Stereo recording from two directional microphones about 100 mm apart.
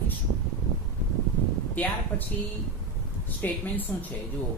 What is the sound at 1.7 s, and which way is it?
Speech, 15° left (ahead or behind).